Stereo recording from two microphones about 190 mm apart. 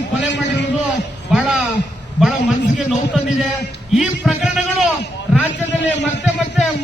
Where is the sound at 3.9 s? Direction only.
Centre (ahead or behind).